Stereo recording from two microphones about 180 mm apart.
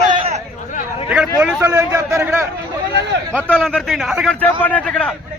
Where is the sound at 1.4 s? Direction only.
10° right (ahead or behind).